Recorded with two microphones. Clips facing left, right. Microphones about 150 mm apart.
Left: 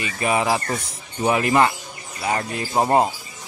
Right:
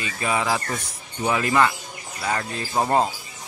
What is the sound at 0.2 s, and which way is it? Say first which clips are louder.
Speech: left 3 dB; 20° left (ahead or behind).